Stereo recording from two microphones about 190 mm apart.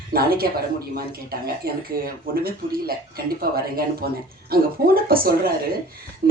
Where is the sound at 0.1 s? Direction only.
50° right (ahead or behind).